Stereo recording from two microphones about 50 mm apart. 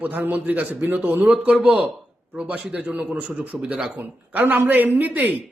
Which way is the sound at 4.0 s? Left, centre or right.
Right.